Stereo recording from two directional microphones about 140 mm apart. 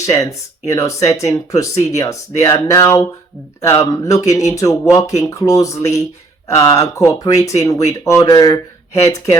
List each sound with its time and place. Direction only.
0.0 s speech: 20° left (ahead or behind)